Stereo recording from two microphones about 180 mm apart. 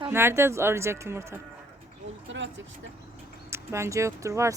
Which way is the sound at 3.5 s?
15° right (ahead or behind).